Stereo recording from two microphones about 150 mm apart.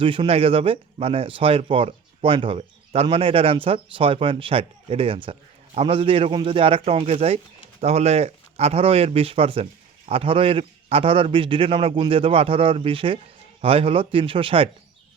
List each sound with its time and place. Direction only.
0.0 s speech: 35° right (ahead or behind)